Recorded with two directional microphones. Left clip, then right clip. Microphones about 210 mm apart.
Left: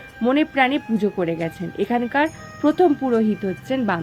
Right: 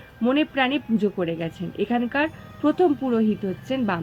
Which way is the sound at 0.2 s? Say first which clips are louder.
Left 4 dB; 20° left (ahead or behind).